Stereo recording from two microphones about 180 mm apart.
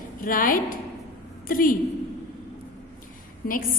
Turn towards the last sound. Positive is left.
turn(degrees=55)  # may be behind; listen again after turning